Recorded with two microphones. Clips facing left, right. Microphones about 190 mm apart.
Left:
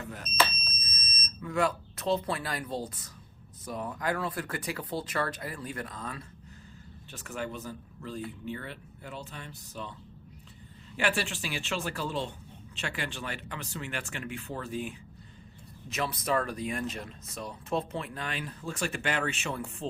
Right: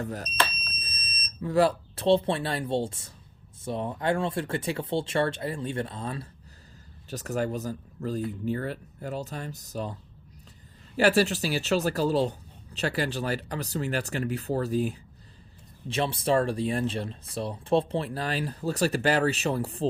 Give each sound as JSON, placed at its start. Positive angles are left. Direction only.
{"t": 0.0, "sound": "speech", "side_deg": -40}
{"t": 10.9, "sound": "speech", "side_deg": -40}